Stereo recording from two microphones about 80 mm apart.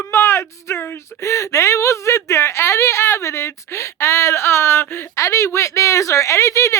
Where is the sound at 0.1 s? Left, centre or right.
Left.